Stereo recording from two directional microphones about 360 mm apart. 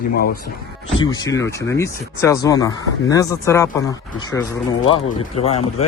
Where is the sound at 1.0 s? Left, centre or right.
Centre.